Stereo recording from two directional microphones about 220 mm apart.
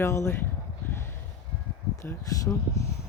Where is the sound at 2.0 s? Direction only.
10° left (ahead or behind).